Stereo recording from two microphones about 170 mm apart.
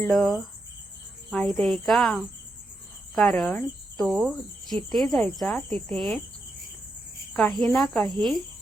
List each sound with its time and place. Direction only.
0.1 s speech: centre (ahead or behind)
7.6 s speech: 5° left (ahead or behind)